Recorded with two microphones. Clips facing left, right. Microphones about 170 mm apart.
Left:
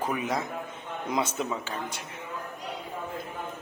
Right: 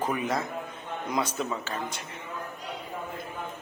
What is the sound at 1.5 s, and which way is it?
Speech, 10° left (ahead or behind).